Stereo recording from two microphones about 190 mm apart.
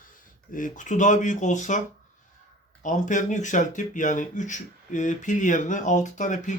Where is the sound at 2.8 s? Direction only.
40° left (ahead or behind).